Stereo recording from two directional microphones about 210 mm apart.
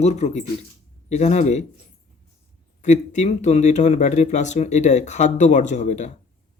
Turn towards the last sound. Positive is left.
turn(degrees=35)  # may be behind; listen again after turning